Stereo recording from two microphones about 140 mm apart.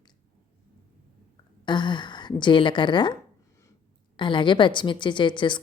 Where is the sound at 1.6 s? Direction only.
35° left (ahead or behind).